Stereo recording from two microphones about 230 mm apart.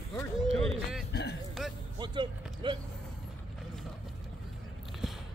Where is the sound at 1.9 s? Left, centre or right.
Centre.